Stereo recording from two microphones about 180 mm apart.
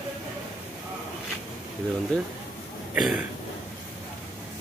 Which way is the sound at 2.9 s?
5° right (ahead or behind).